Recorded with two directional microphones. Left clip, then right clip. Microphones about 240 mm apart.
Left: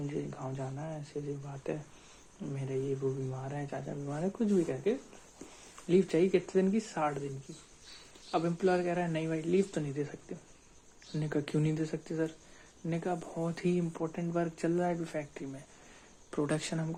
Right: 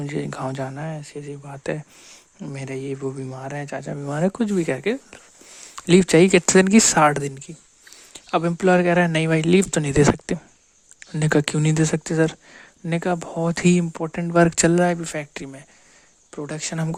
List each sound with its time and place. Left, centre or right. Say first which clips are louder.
0.0 s speech: right 11 dB; right
8.3 s speech: right 12 dB; right
16.3 s speech: right 3 dB; right